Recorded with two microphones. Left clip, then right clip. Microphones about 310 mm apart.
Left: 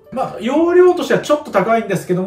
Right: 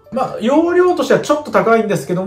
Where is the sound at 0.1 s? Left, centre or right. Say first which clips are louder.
Right 3 dB; centre.